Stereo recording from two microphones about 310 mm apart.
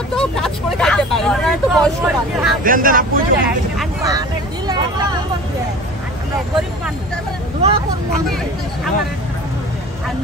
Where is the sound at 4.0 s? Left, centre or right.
Centre.